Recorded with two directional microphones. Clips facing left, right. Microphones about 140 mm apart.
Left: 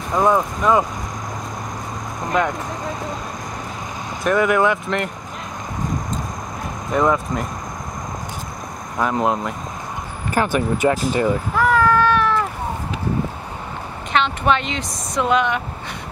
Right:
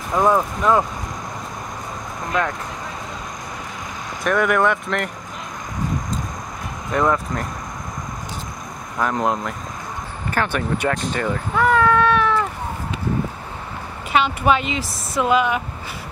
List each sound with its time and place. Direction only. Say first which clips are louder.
0.1 s a woman's voice: even; centre (ahead or behind)
4.2 s a woman's voice: left 1 dB; centre (ahead or behind)
6.9 s speech: left 1 dB; 10° left (ahead or behind)
8.9 s a woman's voice: left 1 dB; 5° left (ahead or behind)
11.0 s cat: left 4 dB; 5° left (ahead or behind)
14.1 s a woman's voice: right 1 dB; 5° right (ahead or behind)